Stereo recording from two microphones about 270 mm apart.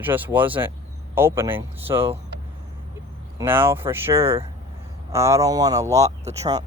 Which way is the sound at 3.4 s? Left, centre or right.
Centre.